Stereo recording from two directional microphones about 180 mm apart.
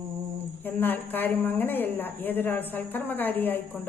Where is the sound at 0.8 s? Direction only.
10° left (ahead or behind).